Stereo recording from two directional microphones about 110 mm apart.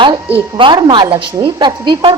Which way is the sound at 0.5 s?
45° right (ahead or behind).